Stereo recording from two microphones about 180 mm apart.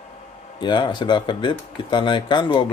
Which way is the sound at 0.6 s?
25° left (ahead or behind).